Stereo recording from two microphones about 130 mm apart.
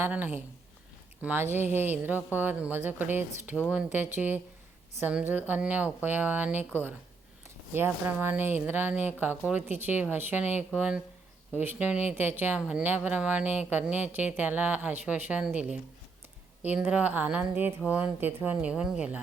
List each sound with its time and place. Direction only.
0.0 s speech: 15° right (ahead or behind)
7.7 s speech: 15° right (ahead or behind)